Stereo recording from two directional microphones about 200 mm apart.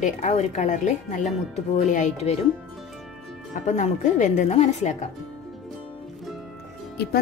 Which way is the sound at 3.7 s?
35° left (ahead or behind).